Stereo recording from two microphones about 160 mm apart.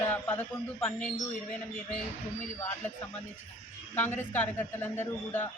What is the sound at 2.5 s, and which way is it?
Speech, 20° left (ahead or behind).